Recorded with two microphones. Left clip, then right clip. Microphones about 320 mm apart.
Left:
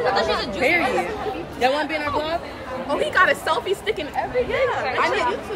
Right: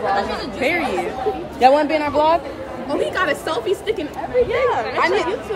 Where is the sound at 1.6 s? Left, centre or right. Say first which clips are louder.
Right 7 dB; centre.